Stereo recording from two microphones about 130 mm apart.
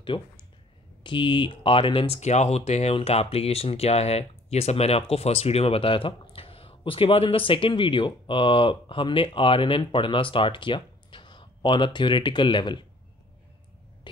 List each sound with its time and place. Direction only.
0.1 s speech: 35° left (ahead or behind)